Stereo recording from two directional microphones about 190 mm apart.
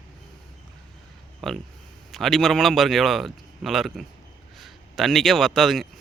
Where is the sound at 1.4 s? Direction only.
Centre (ahead or behind).